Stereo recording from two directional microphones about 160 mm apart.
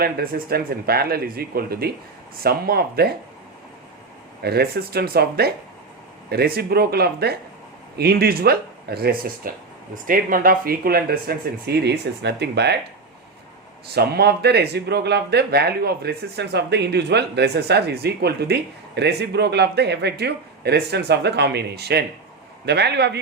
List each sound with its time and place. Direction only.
0.0 s speech: 70° right (ahead or behind)
4.4 s speech: 80° right
13.9 s speech: 90° right